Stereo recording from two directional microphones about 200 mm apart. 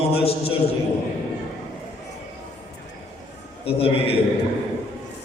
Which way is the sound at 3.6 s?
30° left (ahead or behind).